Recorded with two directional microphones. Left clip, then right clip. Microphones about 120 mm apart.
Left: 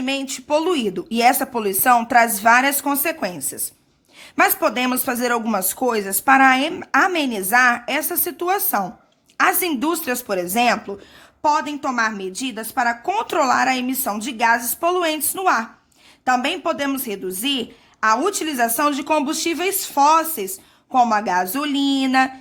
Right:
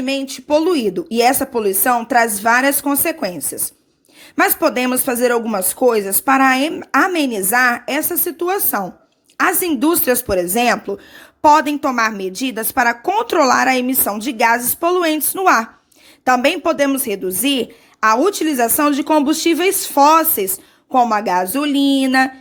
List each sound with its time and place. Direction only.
0.0 s a woman's voice: 20° right (ahead or behind)
9.9 s a woman's voice: 35° right (ahead or behind)
11.4 s a woman's voice: 80° right
11.7 s a woman's voice: 50° right (ahead or behind)
13.1 s a woman's voice: 35° right (ahead or behind)
14.8 s a woman's voice: 35° right (ahead or behind)
15.4 s a woman's voice: 55° right (ahead or behind); by 22.3 s 40° right (ahead or behind)